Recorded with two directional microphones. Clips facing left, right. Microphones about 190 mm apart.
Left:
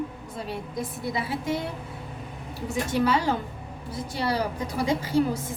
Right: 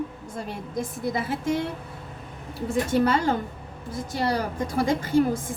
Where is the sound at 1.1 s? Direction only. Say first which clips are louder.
Right 1 dB; 50° right (ahead or behind).